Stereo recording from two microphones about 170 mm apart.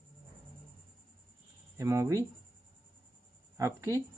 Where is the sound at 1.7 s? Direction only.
15° right (ahead or behind).